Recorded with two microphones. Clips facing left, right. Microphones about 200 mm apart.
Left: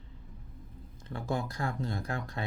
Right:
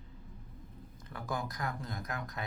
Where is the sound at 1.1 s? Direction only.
25° left (ahead or behind).